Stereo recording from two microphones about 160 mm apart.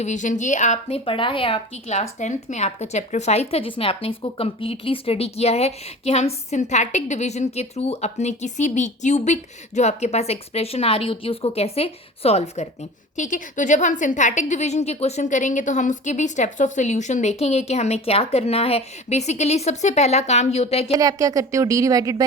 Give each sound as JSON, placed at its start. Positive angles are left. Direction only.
{"t": 0.0, "sound": "a woman's voice", "side_deg": 50}
{"t": 13.1, "sound": "a woman's voice", "side_deg": 50}
{"t": 20.9, "sound": "a woman's voice", "side_deg": -20}